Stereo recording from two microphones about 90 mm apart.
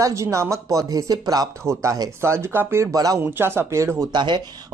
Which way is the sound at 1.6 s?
35° right (ahead or behind).